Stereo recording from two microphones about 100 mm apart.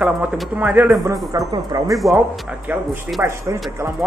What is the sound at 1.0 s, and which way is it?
Speech, 35° right (ahead or behind).